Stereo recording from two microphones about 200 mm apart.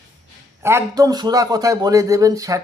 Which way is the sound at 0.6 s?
15° right (ahead or behind).